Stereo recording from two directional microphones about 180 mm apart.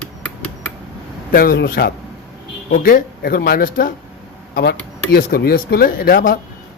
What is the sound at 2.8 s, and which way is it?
Speech, 55° left (ahead or behind).